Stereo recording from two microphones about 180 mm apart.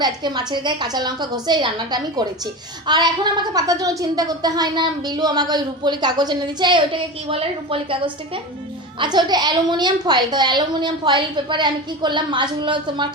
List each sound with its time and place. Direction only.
0.0 s a woman's voice: 25° right (ahead or behind)